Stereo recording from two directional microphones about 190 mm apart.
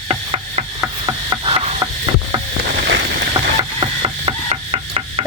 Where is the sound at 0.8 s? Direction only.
20° right (ahead or behind).